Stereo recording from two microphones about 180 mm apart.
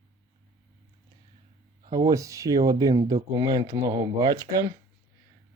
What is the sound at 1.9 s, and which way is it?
Speech, 20° right (ahead or behind).